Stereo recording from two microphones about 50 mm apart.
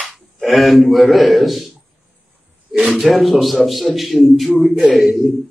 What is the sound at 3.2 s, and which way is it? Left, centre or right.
A man's voice, centre.